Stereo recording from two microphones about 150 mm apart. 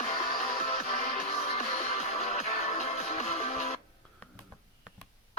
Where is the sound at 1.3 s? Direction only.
50° left (ahead or behind).